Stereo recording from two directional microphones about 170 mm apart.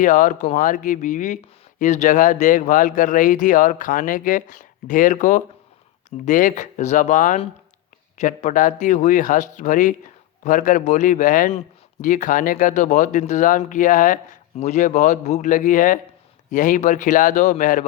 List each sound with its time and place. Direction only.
0.0 s speech: 50° left (ahead or behind)